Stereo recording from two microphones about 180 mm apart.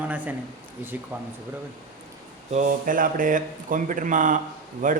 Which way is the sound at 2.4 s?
45° right (ahead or behind).